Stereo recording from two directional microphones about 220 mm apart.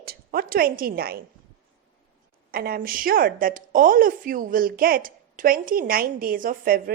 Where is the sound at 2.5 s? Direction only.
40° right (ahead or behind).